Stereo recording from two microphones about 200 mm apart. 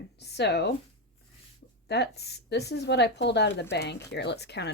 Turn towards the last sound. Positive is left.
turn(degrees=55)  # may be behind; listen again after turning